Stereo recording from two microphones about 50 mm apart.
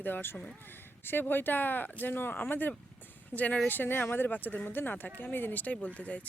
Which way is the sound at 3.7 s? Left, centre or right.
Left.